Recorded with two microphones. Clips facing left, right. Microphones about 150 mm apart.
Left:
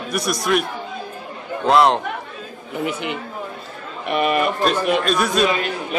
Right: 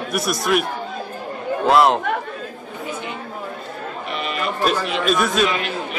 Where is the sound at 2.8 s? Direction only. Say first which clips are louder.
Left 4 dB; 80° left.